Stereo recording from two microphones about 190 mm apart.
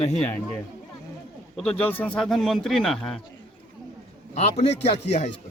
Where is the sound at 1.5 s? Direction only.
5° left (ahead or behind).